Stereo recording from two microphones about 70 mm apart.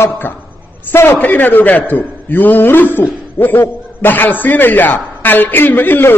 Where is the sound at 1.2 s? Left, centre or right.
Left.